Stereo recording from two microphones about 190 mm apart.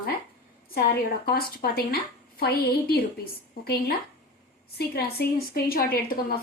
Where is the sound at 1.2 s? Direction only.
50° left (ahead or behind).